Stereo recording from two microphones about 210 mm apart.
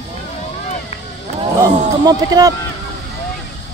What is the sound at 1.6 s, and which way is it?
Speech, 20° right (ahead or behind).